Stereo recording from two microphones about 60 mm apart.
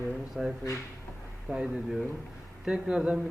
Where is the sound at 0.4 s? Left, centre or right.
Centre.